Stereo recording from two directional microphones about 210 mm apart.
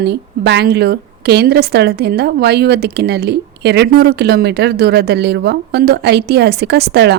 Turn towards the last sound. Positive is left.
turn(degrees=-50)  # may be behind; listen again after turning